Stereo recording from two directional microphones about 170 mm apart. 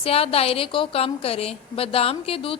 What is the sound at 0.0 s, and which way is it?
A woman's voice, 35° left (ahead or behind).